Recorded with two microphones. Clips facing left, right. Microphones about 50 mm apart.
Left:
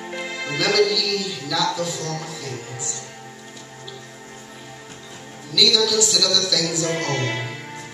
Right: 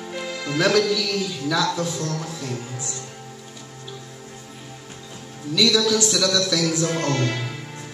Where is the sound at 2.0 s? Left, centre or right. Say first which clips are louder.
Right 1 dB; left.